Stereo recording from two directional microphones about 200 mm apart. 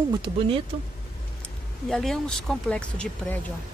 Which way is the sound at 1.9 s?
Centre (ahead or behind).